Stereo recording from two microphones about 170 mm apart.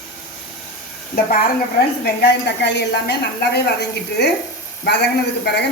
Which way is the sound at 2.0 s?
85° left.